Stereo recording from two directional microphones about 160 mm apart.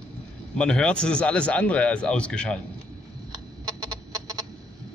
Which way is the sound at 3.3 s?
25° right (ahead or behind).